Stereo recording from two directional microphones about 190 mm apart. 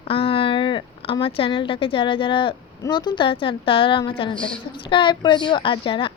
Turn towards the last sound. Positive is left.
turn(degrees=25)  # may be behind; listen again after turning